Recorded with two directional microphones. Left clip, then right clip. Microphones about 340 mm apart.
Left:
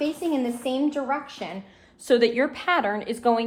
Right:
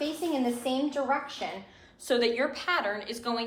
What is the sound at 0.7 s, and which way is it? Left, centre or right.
A woman's voice, left.